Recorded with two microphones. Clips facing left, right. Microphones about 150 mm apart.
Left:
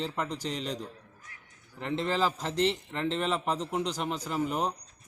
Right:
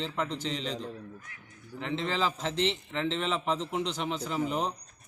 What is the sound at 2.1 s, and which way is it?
A man's voice, 10° left (ahead or behind).